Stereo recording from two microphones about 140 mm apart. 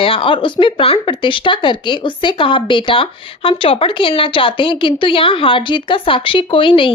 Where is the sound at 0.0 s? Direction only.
40° left (ahead or behind).